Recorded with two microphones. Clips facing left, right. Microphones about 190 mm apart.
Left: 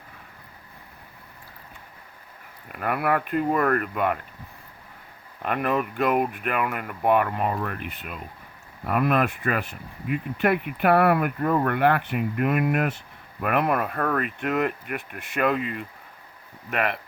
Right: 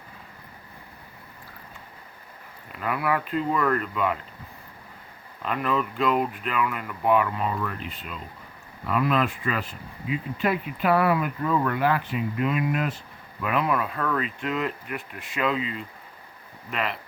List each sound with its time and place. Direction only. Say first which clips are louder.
2.6 s speech: left 2 dB; 55° left (ahead or behind)
5.4 s speech: left 2 dB; 55° left (ahead or behind)